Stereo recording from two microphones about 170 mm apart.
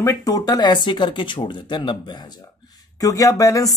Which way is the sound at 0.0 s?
20° left (ahead or behind).